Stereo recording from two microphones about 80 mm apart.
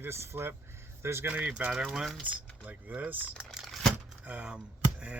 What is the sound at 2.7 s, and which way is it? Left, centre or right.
Speech, right.